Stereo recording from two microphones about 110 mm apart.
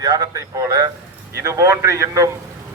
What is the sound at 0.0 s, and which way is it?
A man's voice, 35° right (ahead or behind).